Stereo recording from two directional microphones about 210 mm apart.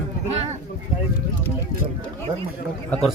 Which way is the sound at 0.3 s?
30° right (ahead or behind).